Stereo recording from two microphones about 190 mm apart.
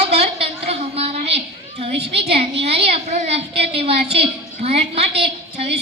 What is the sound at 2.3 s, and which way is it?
A woman's voice, 30° right (ahead or behind).